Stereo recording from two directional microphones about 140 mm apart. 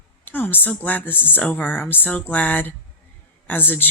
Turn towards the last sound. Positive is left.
turn(degrees=15)  # may be behind; listen again after turning